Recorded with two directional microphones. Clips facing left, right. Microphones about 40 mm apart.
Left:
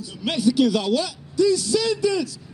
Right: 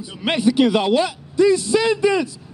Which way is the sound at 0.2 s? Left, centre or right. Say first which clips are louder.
Right 3 dB; right.